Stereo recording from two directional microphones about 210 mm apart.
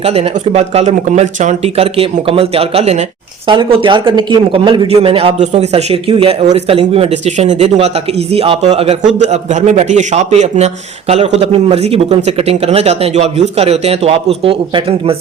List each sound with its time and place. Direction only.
0.0 s speech: 30° right (ahead or behind)